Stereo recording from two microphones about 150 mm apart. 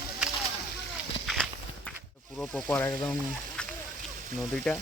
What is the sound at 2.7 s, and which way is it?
Speech, 20° left (ahead or behind).